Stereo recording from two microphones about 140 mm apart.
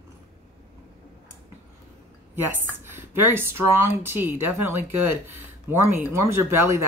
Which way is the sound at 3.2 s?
15° right (ahead or behind).